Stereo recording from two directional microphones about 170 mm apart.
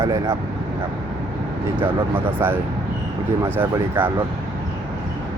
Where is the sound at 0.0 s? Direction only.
15° right (ahead or behind).